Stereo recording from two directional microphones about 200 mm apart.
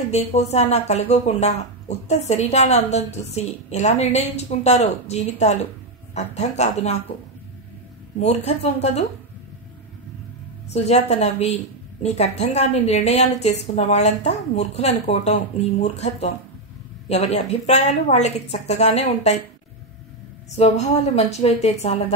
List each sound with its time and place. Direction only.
0.1 s speech: 30° left (ahead or behind)
8.5 s speech: 35° left (ahead or behind)
10.7 s speech: 35° left (ahead or behind)
20.5 s speech: 35° left (ahead or behind)